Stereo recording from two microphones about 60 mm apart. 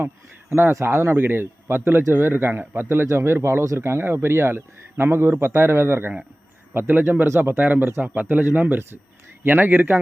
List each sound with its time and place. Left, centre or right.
0.7 s speech: right